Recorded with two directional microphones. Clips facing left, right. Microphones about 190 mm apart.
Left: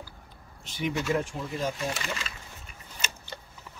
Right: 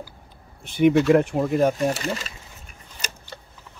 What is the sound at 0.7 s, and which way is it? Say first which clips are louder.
Speech: right 13 dB; 60° right (ahead or behind).